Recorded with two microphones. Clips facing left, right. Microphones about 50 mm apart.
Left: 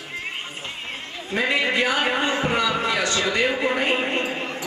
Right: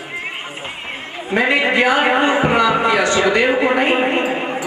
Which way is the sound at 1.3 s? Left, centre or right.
Right.